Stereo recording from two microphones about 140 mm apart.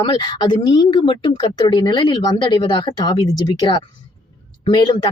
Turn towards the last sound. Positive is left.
turn(degrees=35)  # may be behind; listen again after turning